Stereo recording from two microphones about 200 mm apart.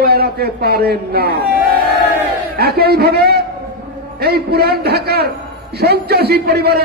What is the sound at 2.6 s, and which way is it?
A man's voice, 50° right (ahead or behind).